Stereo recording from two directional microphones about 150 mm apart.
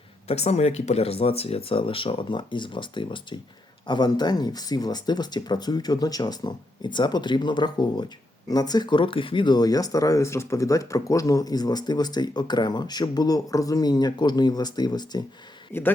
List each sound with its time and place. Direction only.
0.3 s speech: 45° left (ahead or behind); by 15.2 s 25° left (ahead or behind)
15.7 s a man's voice: 15° left (ahead or behind)